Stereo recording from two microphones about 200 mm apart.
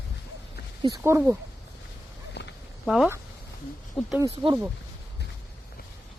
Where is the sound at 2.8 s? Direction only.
Centre (ahead or behind).